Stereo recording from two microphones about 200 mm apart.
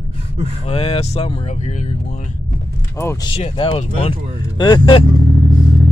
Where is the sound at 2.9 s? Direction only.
15° left (ahead or behind).